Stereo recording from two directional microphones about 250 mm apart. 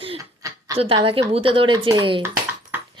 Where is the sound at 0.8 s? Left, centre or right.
Right.